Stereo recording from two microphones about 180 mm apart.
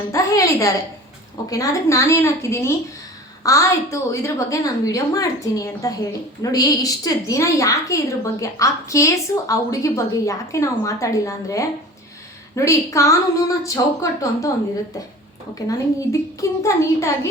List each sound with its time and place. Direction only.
0.1 s a woman's voice: 15° left (ahead or behind)
15.5 s a woman's voice: 20° left (ahead or behind)